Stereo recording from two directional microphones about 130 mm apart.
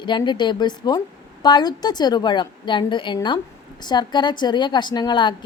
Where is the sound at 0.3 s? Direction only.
35° left (ahead or behind).